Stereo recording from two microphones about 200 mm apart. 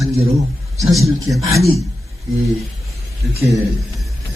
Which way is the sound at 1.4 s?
15° right (ahead or behind).